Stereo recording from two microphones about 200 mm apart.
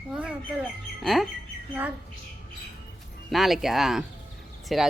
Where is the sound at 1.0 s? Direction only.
Centre (ahead or behind).